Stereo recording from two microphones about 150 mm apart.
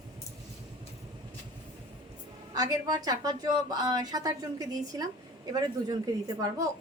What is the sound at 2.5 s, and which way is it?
A woman's voice, 25° right (ahead or behind).